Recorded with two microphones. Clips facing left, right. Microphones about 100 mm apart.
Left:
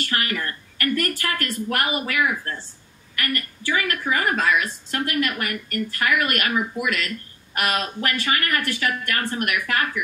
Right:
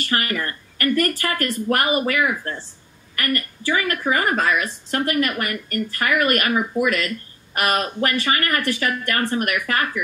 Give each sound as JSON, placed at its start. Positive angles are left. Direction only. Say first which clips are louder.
{"t": 0.0, "sound": "a woman's voice", "louder": "right 2 dB", "side_deg": -40}